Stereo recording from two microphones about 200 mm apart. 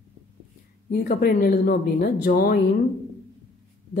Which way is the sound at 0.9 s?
45° left (ahead or behind).